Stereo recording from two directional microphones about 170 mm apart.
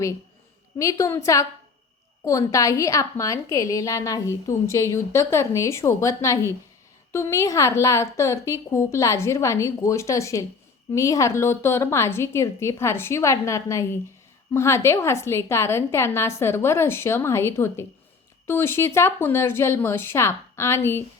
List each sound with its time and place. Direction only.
0.8 s a woman's voice: 20° left (ahead or behind)